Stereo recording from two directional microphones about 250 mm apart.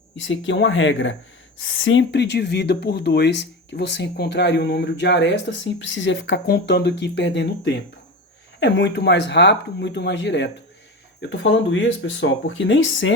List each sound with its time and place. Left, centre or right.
0.2 s speech: left